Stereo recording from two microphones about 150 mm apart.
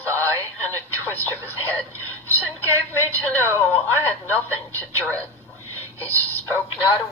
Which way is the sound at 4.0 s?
15° left (ahead or behind).